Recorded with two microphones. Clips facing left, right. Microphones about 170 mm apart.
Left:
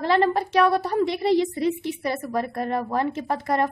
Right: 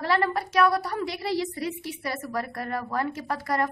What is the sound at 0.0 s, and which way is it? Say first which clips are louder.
A woman's voice: left 5 dB; 20° left (ahead or behind).